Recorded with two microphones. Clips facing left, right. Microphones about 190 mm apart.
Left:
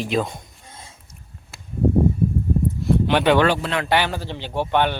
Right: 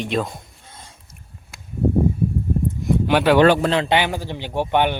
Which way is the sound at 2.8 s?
10° right (ahead or behind).